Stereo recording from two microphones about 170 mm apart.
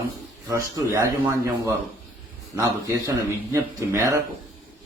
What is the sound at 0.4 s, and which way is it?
Speech, 15° right (ahead or behind).